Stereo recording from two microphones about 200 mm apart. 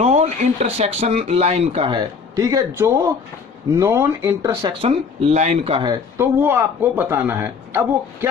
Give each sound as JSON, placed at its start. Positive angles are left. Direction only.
{"t": 0.0, "sound": "speech", "side_deg": -35}